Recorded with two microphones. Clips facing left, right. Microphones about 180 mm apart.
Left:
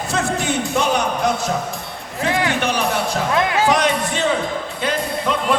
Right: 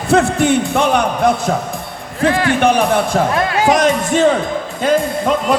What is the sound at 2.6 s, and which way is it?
Music, 50° right (ahead or behind).